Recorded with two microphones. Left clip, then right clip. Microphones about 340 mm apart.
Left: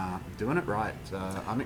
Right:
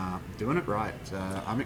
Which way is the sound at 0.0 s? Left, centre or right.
Centre.